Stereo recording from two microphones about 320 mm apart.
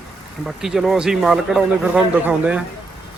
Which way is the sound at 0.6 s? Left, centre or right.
Centre.